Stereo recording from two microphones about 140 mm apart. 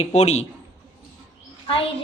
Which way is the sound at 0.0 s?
55° left (ahead or behind).